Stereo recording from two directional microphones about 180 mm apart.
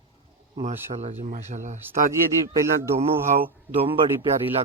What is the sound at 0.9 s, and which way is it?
Speech, 40° right (ahead or behind).